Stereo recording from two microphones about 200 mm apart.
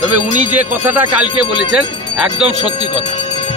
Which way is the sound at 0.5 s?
10° right (ahead or behind).